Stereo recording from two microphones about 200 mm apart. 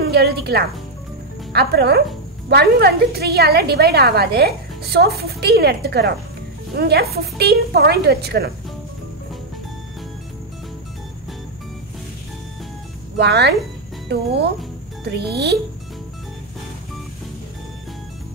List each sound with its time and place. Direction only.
0.0 s music: 55° right (ahead or behind)
1.5 s a woman's voice: 55° right (ahead or behind)
13.2 s a woman's voice: 55° right (ahead or behind)